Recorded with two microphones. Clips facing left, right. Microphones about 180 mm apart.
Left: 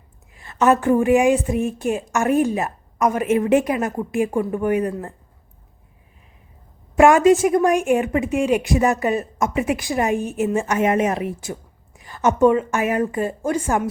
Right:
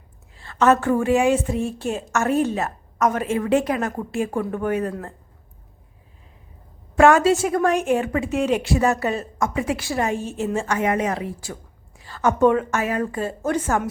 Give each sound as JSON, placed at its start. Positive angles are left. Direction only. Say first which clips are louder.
{"t": 0.3, "sound": "a woman's voice", "louder": "left 1 dB", "side_deg": 15}
{"t": 6.9, "sound": "a woman's voice", "louder": "left 2 dB", "side_deg": 15}
{"t": 11.9, "sound": "a sound", "louder": "left 2 dB", "side_deg": 15}
{"t": 12.5, "sound": "a woman's voice", "louder": "left 2 dB", "side_deg": 10}